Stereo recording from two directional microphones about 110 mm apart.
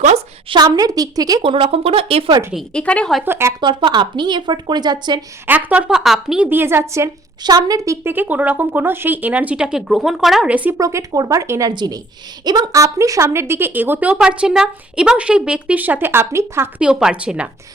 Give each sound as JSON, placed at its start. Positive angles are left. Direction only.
{"t": 0.5, "sound": "a woman's voice", "side_deg": -35}
{"t": 1.4, "sound": "speech", "side_deg": -55}
{"t": 2.7, "sound": "a woman's voice", "side_deg": 10}
{"t": 3.2, "sound": "speech", "side_deg": -20}
{"t": 3.6, "sound": "speech", "side_deg": -45}
{"t": 5.5, "sound": "speech", "side_deg": -15}
{"t": 6.5, "sound": "speech", "side_deg": -20}
{"t": 7.4, "sound": "a woman's voice", "side_deg": -35}
{"t": 8.0, "sound": "speech", "side_deg": -20}
{"t": 10.5, "sound": "speech", "side_deg": -15}
{"t": 10.8, "sound": "speech", "side_deg": -30}
{"t": 11.7, "sound": "a woman's voice", "side_deg": -40}
{"t": 16.8, "sound": "speech", "side_deg": -5}